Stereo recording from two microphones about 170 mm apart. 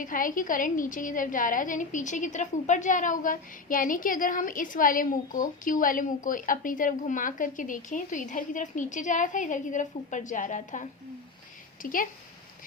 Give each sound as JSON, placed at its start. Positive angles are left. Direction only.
{"t": 0.0, "sound": "a woman's voice", "side_deg": 50}